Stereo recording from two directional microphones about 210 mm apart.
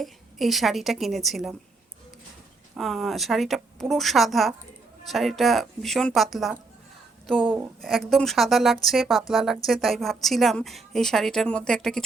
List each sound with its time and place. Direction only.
0.0 s a woman's voice: centre (ahead or behind)
2.7 s a woman's voice: centre (ahead or behind)
7.8 s a woman's voice: centre (ahead or behind)